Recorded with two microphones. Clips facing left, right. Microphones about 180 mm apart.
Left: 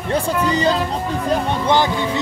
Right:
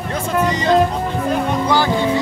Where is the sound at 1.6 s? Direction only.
20° left (ahead or behind).